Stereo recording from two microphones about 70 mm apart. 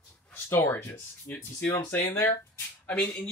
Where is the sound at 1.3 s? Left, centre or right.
Centre.